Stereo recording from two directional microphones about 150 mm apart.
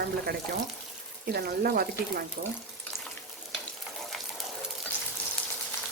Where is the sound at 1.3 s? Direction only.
75° right (ahead or behind).